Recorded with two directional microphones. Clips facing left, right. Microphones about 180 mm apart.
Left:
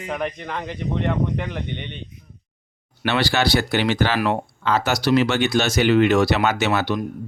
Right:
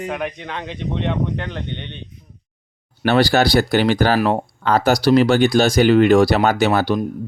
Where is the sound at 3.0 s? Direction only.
40° right (ahead or behind).